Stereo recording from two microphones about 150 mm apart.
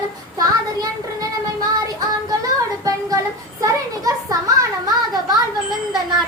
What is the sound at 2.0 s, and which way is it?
Music, 25° right (ahead or behind).